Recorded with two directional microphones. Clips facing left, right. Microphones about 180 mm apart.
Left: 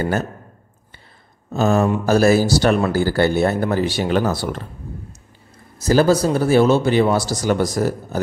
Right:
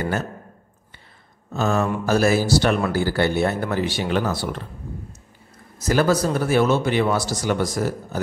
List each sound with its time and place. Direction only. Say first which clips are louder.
1.5 s speech: left 5 dB; 35° left (ahead or behind)
5.8 s speech: left 4 dB; 30° left (ahead or behind)